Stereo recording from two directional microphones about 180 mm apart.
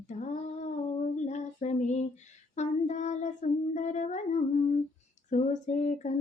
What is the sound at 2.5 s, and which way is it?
Child singing, 40° left (ahead or behind).